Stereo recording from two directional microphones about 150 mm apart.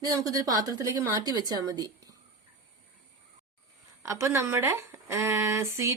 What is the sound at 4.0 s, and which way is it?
Speech, 20° right (ahead or behind).